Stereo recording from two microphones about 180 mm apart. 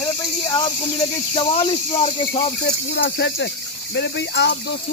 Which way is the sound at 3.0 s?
75° left (ahead or behind).